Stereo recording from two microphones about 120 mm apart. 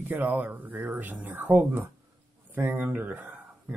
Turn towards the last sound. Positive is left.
turn(degrees=-15)  # may be behind; listen again after turning